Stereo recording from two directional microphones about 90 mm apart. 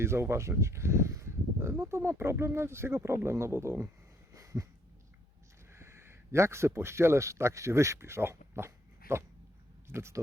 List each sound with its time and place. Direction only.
0.0 s speech: 30° right (ahead or behind)
4.4 s dog: 35° right (ahead or behind)
5.7 s speech: 30° right (ahead or behind)